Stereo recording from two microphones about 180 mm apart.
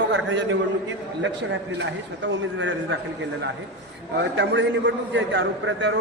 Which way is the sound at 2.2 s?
90° right.